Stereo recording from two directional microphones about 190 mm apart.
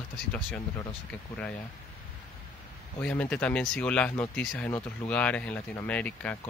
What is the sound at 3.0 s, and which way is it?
Speech, 5° left (ahead or behind).